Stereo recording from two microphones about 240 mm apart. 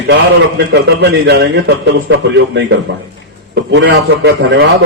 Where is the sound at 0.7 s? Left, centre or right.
Right.